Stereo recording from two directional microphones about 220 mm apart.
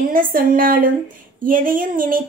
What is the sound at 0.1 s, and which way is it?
A woman's voice, 40° right (ahead or behind).